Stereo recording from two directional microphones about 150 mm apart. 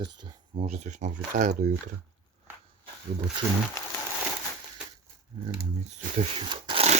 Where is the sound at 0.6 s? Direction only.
50° right (ahead or behind).